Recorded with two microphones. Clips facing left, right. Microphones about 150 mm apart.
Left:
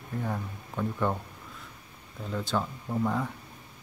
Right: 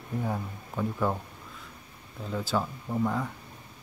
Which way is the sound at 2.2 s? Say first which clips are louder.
Right 1 dB; 5° right (ahead or behind).